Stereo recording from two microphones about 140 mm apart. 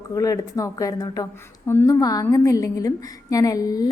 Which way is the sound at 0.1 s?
25° left (ahead or behind).